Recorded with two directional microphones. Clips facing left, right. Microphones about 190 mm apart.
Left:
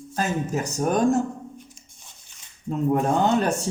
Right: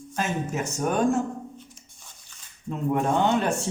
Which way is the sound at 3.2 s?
40° left (ahead or behind).